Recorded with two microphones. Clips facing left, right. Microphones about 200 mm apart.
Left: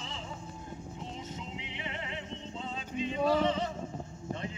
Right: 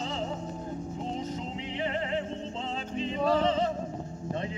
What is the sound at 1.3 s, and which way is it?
Music, 35° right (ahead or behind).